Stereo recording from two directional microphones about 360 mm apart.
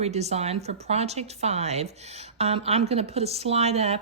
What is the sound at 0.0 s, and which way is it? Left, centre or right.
A woman's voice, centre.